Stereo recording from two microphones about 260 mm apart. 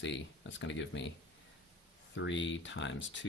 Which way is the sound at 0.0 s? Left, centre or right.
Left.